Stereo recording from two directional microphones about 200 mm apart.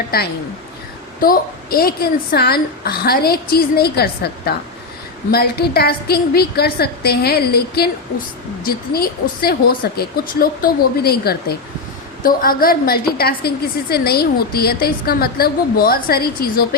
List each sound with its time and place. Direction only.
0.1 s a woman's voice: 50° left (ahead or behind)